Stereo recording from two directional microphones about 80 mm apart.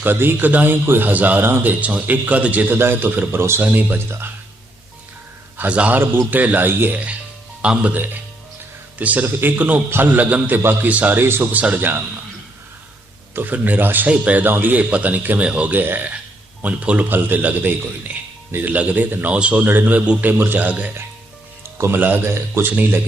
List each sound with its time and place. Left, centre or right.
0.0 s a man's voice: right
1.5 s speech: right
1.8 s a man's voice: centre
5.5 s a man's voice: centre
6.0 s a man's voice: right
13.3 s a man's voice: right
21.8 s speech: right
22.7 s a man's voice: right